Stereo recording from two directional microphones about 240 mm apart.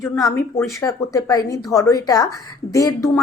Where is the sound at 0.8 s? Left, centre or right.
Centre.